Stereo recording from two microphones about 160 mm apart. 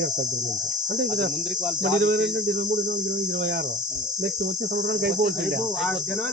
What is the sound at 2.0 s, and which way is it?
Cricket, 60° right (ahead or behind).